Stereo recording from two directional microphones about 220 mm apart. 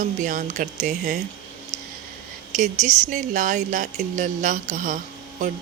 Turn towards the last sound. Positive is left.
turn(degrees=-35)  # may be behind; listen again after turning